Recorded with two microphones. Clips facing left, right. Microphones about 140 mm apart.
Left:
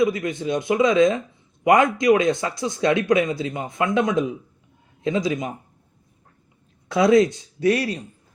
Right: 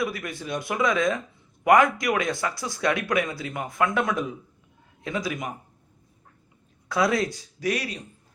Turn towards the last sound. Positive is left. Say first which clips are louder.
# left 7 dB
turn(degrees=30)  # may be behind; listen again after turning